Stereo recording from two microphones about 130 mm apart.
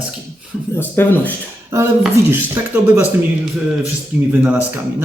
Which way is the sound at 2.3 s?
15° right (ahead or behind).